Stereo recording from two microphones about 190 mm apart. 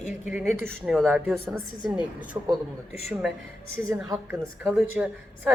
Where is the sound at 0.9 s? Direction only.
Centre (ahead or behind).